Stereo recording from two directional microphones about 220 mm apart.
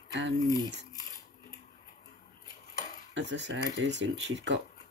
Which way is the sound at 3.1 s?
55° right (ahead or behind).